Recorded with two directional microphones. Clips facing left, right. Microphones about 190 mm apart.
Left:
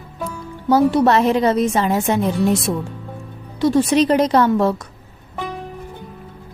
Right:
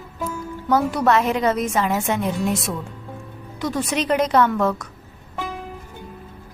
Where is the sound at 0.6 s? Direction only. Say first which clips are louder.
Left 5 dB; 30° left (ahead or behind).